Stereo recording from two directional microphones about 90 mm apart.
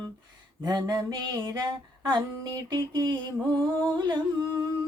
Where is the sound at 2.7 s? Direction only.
55° right (ahead or behind).